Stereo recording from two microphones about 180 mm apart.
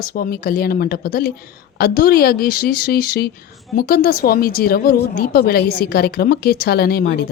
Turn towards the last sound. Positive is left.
turn(degrees=60)  # may be behind; listen again after turning